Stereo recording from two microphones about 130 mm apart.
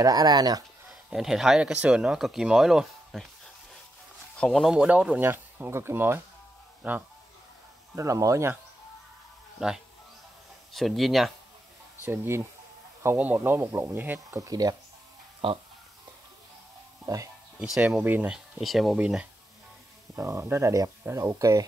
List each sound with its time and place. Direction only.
0.0 s speech: 30° right (ahead or behind)
1.1 s speech: 5° right (ahead or behind)
4.4 s speech: centre (ahead or behind)
4.7 s speech: 10° right (ahead or behind)
7.9 s speech: 25° right (ahead or behind)
9.6 s speech: 5° right (ahead or behind)
12.0 s speech: 20° right (ahead or behind)
15.4 s speech: 45° right (ahead or behind)
17.0 s speech: 30° right (ahead or behind)
17.6 s speech: 5° right (ahead or behind)
20.2 s speech: 20° right (ahead or behind)